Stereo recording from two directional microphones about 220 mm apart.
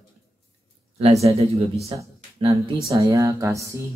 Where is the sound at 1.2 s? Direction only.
25° right (ahead or behind).